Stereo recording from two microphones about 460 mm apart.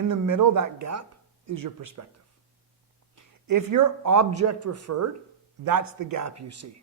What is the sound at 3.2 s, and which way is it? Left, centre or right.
A man's voice, right.